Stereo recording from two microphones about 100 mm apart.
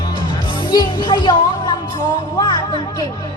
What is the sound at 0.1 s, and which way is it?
Music, 50° left (ahead or behind).